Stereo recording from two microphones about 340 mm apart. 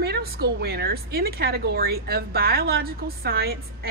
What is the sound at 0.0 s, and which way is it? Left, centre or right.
Speech, right.